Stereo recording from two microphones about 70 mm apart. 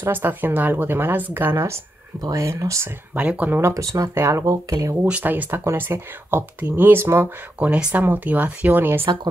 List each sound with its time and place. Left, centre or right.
0.0 s speech: right
2.3 s speech: right
3.2 s speech: right
3.7 s speech: right
4.1 s speech: right
4.6 s speech: right
5.0 s speech: right
7.5 s speech: centre